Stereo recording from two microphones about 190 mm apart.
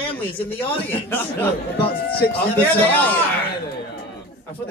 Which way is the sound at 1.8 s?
55° left (ahead or behind).